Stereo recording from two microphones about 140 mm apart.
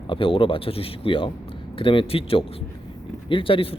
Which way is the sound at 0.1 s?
40° left (ahead or behind).